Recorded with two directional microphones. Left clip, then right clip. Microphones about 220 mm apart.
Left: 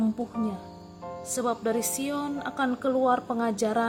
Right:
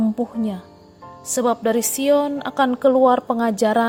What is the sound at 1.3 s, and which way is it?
A woman's voice, 30° right (ahead or behind).